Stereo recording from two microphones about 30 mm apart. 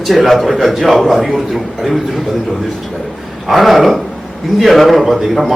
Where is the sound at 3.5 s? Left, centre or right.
Centre.